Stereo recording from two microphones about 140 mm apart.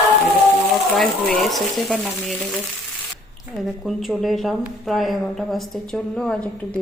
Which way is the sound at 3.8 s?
Centre (ahead or behind).